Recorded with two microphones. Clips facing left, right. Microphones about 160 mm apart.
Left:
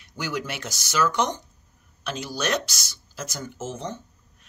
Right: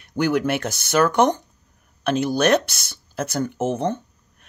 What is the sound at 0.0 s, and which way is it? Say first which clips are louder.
Speech: right 10 dB; 55° right (ahead or behind).